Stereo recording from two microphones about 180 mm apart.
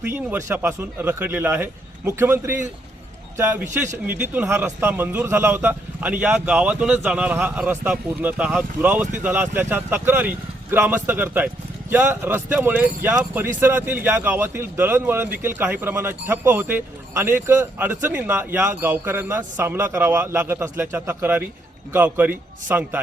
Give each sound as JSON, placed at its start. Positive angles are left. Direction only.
{"t": 0.0, "sound": "a man's voice", "side_deg": -10}